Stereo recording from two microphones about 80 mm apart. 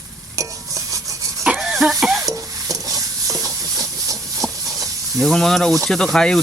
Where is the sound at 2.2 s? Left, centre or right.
Right.